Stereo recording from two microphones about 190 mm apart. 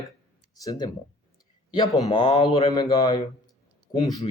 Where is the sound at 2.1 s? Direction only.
25° left (ahead or behind).